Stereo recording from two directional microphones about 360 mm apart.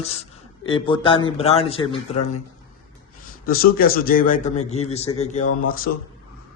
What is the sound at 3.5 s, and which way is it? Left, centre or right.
A man's voice, left.